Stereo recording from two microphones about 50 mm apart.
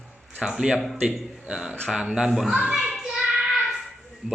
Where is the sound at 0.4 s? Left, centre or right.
Centre.